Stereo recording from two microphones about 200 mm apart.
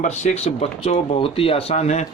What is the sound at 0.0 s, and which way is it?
Speech, 35° left (ahead or behind).